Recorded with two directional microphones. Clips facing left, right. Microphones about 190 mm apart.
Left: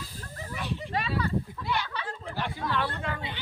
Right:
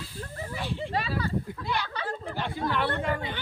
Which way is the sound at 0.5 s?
30° right (ahead or behind).